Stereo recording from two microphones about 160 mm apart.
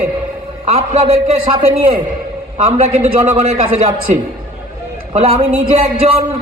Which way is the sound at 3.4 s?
40° right (ahead or behind).